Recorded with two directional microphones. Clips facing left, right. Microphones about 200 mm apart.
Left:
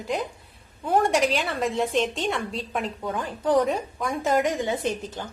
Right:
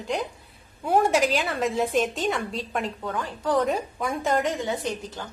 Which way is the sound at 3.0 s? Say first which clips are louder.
Left 2 dB; 15° left (ahead or behind).